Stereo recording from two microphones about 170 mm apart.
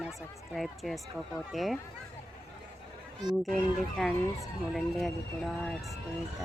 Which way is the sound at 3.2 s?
25° right (ahead or behind).